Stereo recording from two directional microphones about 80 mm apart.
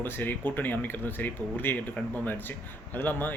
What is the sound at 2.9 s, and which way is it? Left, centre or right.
Speech, left.